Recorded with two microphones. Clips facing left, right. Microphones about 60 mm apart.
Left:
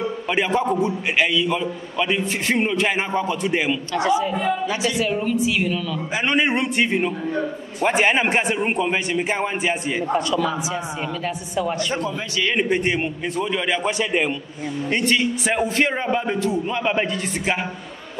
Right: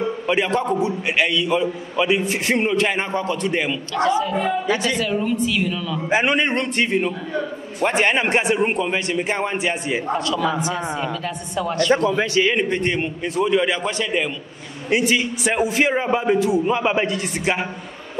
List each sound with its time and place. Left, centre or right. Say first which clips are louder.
0.3 s a man's voice: even; centre
5.2 s a man's voice: even; centre
11.9 s a man's voice: right 8 dB; right
12.5 s a man's voice: even; centre
14.9 s a man's voice: right 2 dB; centre